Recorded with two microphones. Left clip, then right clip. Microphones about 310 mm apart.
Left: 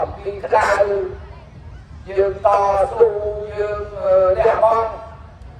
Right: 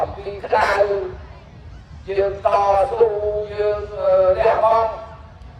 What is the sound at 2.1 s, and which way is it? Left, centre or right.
A man's voice, right.